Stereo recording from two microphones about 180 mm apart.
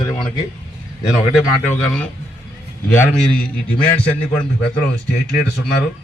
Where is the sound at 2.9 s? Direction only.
10° left (ahead or behind).